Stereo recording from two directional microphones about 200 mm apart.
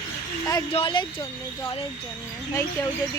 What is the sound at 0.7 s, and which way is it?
Speech, 25° left (ahead or behind).